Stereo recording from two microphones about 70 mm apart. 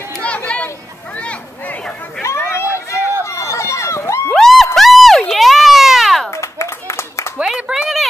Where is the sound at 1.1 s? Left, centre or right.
Centre.